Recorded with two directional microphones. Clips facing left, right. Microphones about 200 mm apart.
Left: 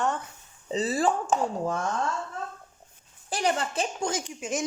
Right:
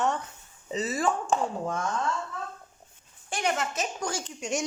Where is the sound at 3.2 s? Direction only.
35° left (ahead or behind); by 4.3 s 20° left (ahead or behind).